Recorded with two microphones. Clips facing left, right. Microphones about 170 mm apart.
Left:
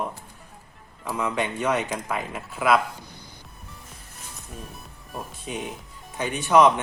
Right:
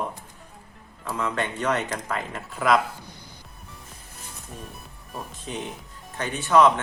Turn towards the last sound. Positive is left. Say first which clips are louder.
# left 1 dB
turn(degrees=15)  # may be behind; listen again after turning